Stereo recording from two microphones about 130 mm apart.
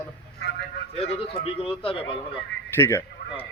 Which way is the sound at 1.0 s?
45° left (ahead or behind).